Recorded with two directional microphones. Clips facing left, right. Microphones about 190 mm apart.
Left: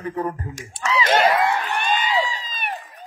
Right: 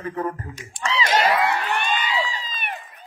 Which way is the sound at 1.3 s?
65° right (ahead or behind).